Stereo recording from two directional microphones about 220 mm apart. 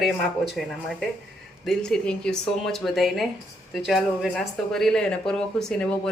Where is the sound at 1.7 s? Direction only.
5° left (ahead or behind).